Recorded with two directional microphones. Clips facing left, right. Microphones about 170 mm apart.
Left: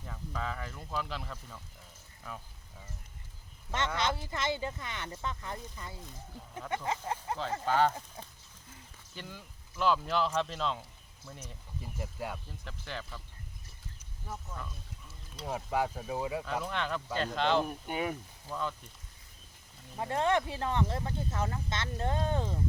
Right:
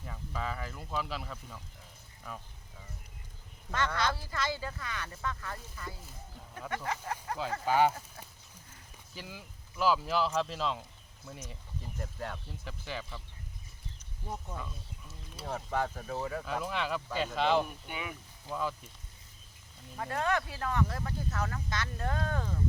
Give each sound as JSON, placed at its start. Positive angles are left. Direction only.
{"t": 0.0, "sound": "speech", "side_deg": 0}
{"t": 3.7, "sound": "speech", "side_deg": 20}
{"t": 7.6, "sound": "speech", "side_deg": -10}
{"t": 9.1, "sound": "speech", "side_deg": -5}
{"t": 11.4, "sound": "speech", "side_deg": 10}
{"t": 12.6, "sound": "speech", "side_deg": -5}
{"t": 15.4, "sound": "speech", "side_deg": 10}
{"t": 16.5, "sound": "speech", "side_deg": -5}
{"t": 17.7, "sound": "speech", "side_deg": 40}
{"t": 18.4, "sound": "speech", "side_deg": -5}
{"t": 20.0, "sound": "speech", "side_deg": 20}